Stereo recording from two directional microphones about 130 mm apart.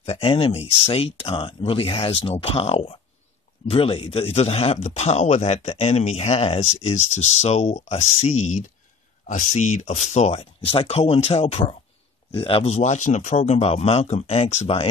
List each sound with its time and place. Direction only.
0.0 s speech: 45° left (ahead or behind)